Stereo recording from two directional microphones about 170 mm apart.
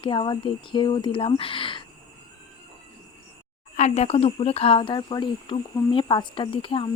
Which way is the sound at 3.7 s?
40° left (ahead or behind).